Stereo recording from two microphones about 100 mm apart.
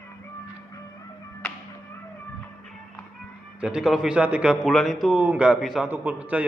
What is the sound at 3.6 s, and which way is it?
A man's voice, 5° right (ahead or behind).